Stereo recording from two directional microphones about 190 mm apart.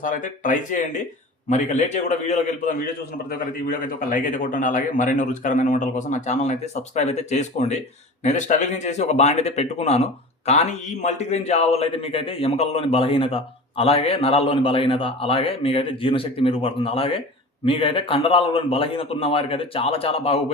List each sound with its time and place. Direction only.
0.0 s a man's voice: 45° left (ahead or behind)